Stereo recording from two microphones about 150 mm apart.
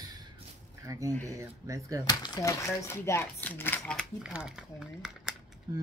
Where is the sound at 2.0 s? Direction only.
25° left (ahead or behind); by 4.0 s 10° left (ahead or behind).